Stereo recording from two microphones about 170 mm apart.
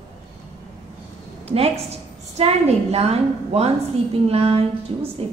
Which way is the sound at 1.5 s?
35° right (ahead or behind).